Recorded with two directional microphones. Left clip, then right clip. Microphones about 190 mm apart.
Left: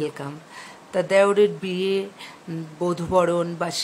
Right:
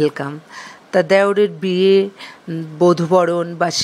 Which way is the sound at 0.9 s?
35° right (ahead or behind).